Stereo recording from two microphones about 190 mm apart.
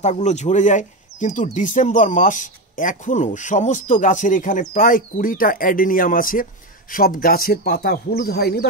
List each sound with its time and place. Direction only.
0.0 s speech: 35° left (ahead or behind); by 8.6 s 55° left (ahead or behind)